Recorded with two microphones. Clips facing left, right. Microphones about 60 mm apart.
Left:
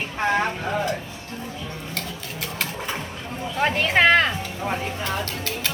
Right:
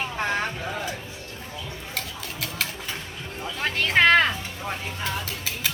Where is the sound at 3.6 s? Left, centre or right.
Centre.